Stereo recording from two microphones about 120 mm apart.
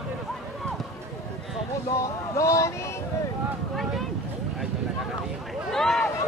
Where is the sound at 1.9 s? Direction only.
25° left (ahead or behind).